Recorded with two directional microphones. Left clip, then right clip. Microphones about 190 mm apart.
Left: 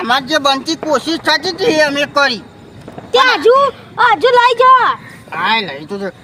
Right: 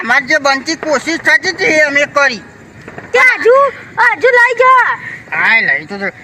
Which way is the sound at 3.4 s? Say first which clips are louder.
Even; 10° left (ahead or behind).